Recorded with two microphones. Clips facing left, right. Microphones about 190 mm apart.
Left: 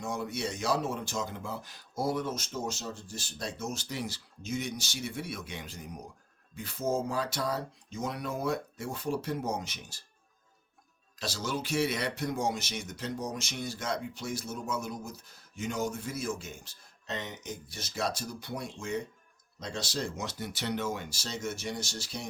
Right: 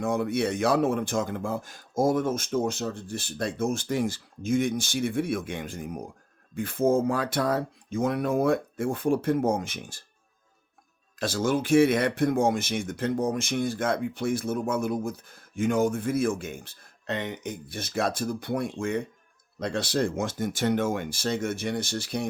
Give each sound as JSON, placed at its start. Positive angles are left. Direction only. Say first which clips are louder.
{"t": 0.0, "sound": "speech", "louder": "right 9 dB", "side_deg": -55}
{"t": 11.2, "sound": "speech", "louder": "right 9 dB", "side_deg": -50}